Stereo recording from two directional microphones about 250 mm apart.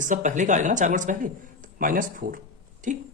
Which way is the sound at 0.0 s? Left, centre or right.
Right.